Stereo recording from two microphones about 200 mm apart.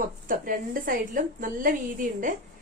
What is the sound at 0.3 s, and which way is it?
A woman's voice, 45° right (ahead or behind).